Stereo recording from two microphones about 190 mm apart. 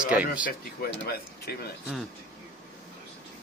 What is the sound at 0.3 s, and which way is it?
Speech, 50° left (ahead or behind).